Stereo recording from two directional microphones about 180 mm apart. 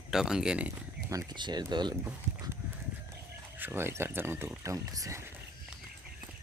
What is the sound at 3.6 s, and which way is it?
Speech, 15° right (ahead or behind).